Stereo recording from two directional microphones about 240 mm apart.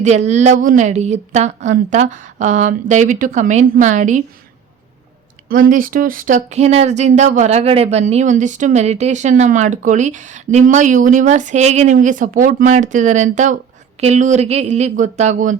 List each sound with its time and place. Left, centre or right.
0.0 s a woman's voice: right
5.5 s a woman's voice: right